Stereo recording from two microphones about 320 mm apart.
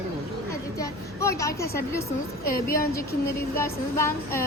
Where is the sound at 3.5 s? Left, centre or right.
Centre.